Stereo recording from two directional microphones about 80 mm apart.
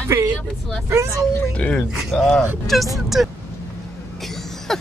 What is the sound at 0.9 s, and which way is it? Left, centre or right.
Speech, right.